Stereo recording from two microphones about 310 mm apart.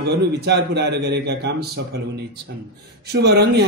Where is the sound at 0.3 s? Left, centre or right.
Right.